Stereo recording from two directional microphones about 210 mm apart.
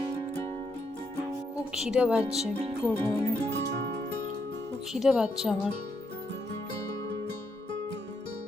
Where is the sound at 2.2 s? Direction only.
30° right (ahead or behind).